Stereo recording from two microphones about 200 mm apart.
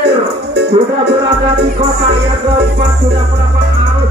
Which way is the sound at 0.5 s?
55° right (ahead or behind).